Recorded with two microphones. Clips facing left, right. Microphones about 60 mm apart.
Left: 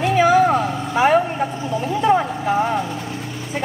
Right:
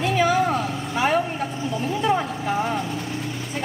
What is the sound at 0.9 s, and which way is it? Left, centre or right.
Vehicle, centre.